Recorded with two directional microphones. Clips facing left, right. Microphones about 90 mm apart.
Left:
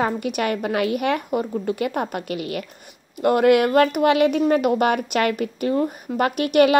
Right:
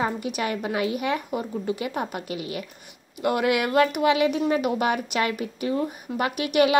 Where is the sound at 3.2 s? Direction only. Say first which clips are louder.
Left 7 dB; 45° left (ahead or behind).